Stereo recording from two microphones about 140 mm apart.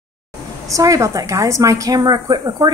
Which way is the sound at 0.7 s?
25° right (ahead or behind).